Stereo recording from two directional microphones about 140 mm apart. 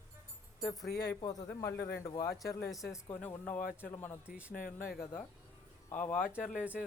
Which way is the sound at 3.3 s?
15° left (ahead or behind).